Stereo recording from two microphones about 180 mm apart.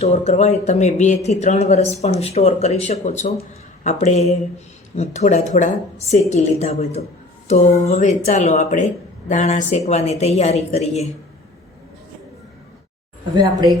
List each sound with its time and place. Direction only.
0.0 s a woman's voice: 35° left (ahead or behind)